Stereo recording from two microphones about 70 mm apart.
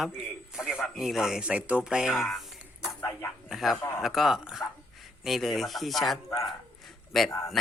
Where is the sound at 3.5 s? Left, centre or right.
Centre.